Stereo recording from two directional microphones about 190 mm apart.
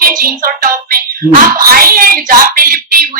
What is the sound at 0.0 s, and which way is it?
Speech, 50° right (ahead or behind).